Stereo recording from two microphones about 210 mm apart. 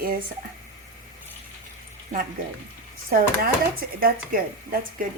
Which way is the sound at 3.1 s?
45° right (ahead or behind).